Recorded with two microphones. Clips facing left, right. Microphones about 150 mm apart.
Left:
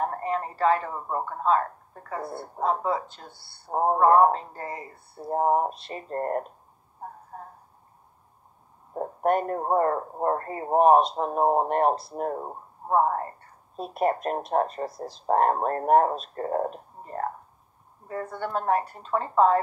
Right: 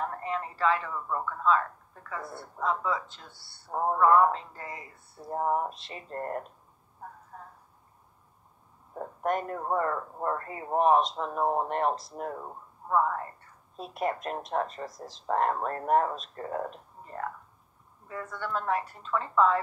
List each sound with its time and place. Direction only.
0.0 s speech: 45° left (ahead or behind)
7.0 s a sound: 40° left (ahead or behind)
8.9 s speech: 40° left (ahead or behind)
14.9 s speech: 60° left (ahead or behind)
15.2 s speech: 40° left (ahead or behind)